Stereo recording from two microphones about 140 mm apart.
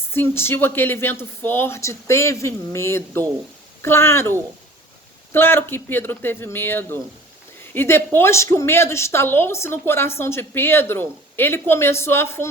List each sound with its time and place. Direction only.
0.1 s a woman's voice: 15° left (ahead or behind)